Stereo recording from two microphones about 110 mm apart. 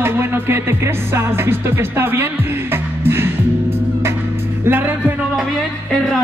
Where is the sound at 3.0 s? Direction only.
20° right (ahead or behind).